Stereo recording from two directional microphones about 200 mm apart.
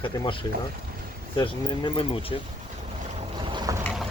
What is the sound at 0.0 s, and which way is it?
Speech, 25° left (ahead or behind).